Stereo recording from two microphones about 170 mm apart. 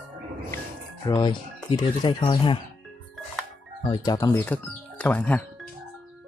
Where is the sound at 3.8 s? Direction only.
25° left (ahead or behind); by 5.4 s 10° left (ahead or behind).